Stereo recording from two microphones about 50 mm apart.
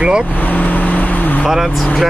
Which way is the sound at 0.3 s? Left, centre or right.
Left.